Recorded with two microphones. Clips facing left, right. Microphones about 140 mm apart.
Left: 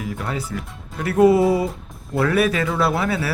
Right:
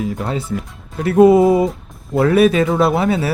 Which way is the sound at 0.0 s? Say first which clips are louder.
Right 5 dB; 25° right (ahead or behind).